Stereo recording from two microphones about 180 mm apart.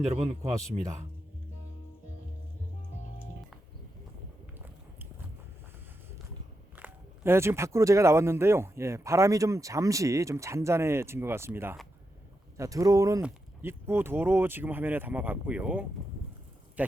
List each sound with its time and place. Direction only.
0.1 s speech: 35° right (ahead or behind)
6.7 s speech: 10° right (ahead or behind)